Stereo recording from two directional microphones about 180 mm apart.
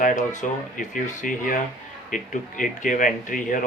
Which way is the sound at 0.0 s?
45° left (ahead or behind).